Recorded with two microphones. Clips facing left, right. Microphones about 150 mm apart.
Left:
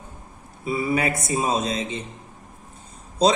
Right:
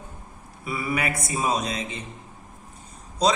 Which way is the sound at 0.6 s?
25° left (ahead or behind).